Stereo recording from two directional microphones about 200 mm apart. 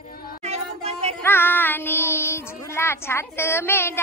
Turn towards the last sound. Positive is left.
turn(degrees=10)  # may be behind; listen again after turning